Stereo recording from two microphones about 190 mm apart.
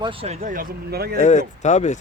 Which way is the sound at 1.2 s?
40° left (ahead or behind).